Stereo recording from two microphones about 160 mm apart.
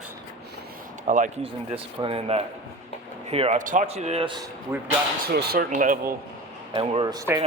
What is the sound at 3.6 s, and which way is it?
Speech, 55° right (ahead or behind).